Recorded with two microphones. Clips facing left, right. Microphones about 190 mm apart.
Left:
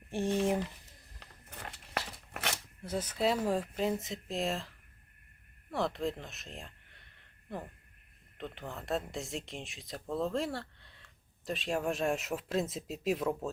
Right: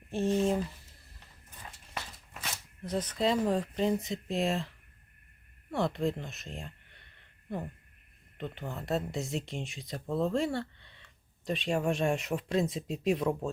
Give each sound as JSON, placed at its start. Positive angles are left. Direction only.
{"t": 1.2, "sound": "a sound", "side_deg": 70}
{"t": 2.8, "sound": "speech", "side_deg": 10}
{"t": 5.7, "sound": "speech", "side_deg": 0}